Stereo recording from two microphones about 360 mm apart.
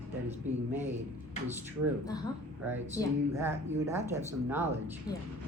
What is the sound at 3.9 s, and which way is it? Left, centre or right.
Speech, centre.